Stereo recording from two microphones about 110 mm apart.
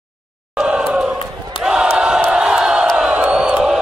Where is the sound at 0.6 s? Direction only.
10° right (ahead or behind).